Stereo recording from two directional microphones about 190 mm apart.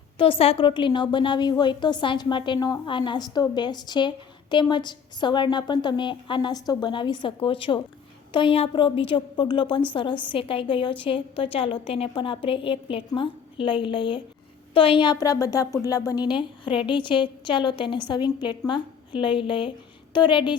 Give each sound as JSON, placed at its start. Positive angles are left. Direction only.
{"t": 0.2, "sound": "a woman's voice", "side_deg": 30}